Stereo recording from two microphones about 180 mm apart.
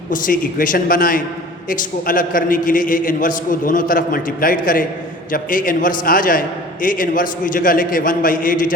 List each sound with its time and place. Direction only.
0.1 s a man's voice: 50° left (ahead or behind)